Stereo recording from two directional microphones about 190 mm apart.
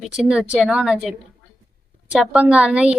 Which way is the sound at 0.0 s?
5° right (ahead or behind).